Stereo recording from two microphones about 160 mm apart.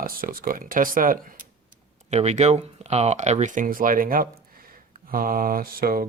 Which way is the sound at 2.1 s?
45° right (ahead or behind).